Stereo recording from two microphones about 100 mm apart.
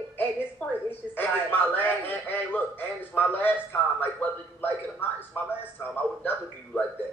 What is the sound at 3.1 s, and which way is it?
Speech, 20° left (ahead or behind).